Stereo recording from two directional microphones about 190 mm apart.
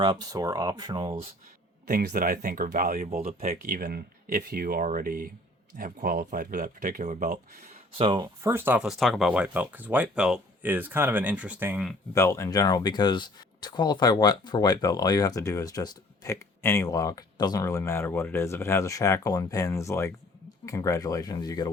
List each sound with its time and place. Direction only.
0.0 s speech: 20° right (ahead or behind)
1.9 s speech: 50° right (ahead or behind)
3.1 s speech: 35° right (ahead or behind)
3.4 s speech: 50° right (ahead or behind)
7.9 s speech: 25° right (ahead or behind); by 11.9 s 5° right (ahead or behind)
12.1 s speech: 15° left (ahead or behind)